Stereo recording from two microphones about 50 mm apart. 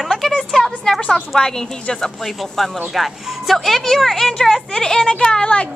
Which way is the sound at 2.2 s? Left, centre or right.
Centre.